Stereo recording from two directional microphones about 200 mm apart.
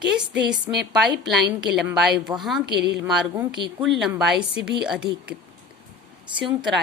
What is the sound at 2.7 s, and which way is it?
Speech, 55° right (ahead or behind).